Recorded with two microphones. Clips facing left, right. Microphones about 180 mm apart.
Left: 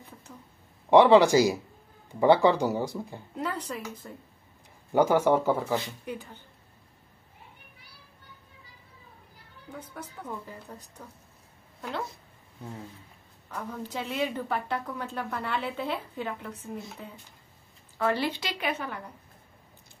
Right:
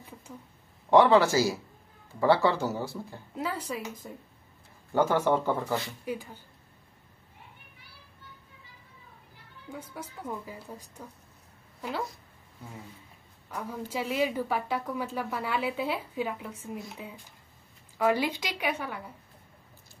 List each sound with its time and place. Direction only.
0.3 s speech: 10° right (ahead or behind)
0.8 s speech: 15° left (ahead or behind)
3.3 s a woman's voice: 10° right (ahead or behind)
4.9 s speech: 10° left (ahead or behind)
6.0 s a woman's voice: 10° right (ahead or behind)
9.7 s a woman's voice: 10° right (ahead or behind)
13.5 s a woman's voice: 10° right (ahead or behind)